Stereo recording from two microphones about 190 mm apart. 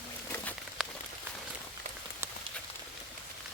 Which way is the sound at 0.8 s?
5° right (ahead or behind).